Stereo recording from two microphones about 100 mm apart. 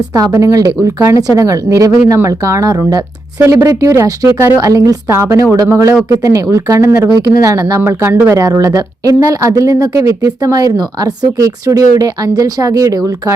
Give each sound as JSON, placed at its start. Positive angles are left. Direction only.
{"t": 0.3, "sound": "speech", "side_deg": -30}
{"t": 7.8, "sound": "speech", "side_deg": -20}
{"t": 8.4, "sound": "speech", "side_deg": -35}